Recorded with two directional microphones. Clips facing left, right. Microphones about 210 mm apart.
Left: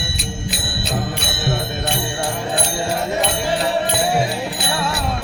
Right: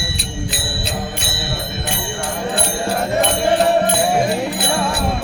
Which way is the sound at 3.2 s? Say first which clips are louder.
Right 4 dB; 50° right (ahead or behind).